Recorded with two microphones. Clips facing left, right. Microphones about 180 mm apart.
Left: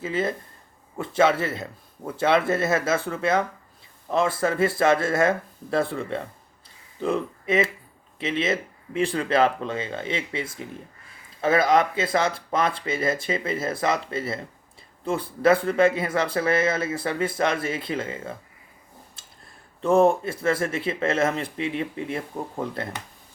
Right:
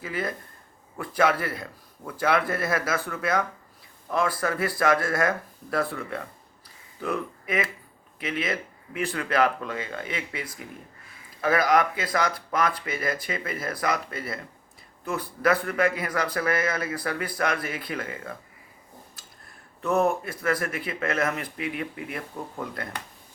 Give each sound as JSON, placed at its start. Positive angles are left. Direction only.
{"t": 0.0, "sound": "a man's voice", "side_deg": 25}
{"t": 19.8, "sound": "a man's voice", "side_deg": 30}